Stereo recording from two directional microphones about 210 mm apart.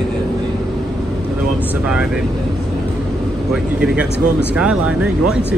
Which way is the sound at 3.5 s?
5° right (ahead or behind).